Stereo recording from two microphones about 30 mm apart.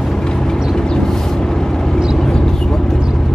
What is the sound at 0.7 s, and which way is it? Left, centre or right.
Vehicle, left.